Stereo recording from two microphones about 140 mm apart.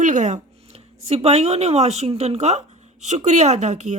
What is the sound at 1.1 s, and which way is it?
Speech, 50° right (ahead or behind).